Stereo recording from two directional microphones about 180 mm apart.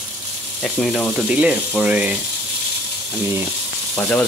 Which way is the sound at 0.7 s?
5° left (ahead or behind).